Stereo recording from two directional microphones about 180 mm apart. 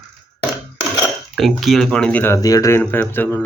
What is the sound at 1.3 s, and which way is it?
Speech, centre (ahead or behind).